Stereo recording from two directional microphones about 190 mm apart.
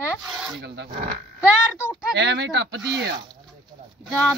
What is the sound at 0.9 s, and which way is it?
Speech, 45° right (ahead or behind).